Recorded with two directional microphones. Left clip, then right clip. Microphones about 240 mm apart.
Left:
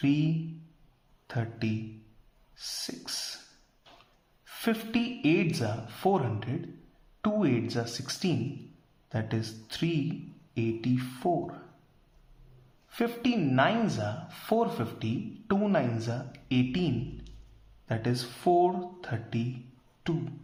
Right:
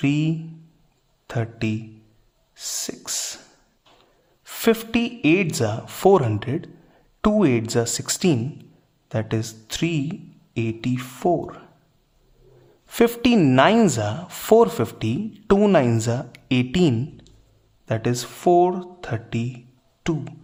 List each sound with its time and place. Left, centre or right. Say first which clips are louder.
0.0 s speech: right 6 dB; right
4.4 s speech: right 12 dB; right
12.9 s speech: right 12 dB; right